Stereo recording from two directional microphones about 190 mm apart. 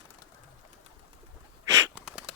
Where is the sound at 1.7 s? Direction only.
20° right (ahead or behind).